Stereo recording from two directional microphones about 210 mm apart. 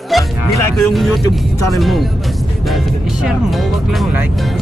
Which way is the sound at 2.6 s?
Centre (ahead or behind).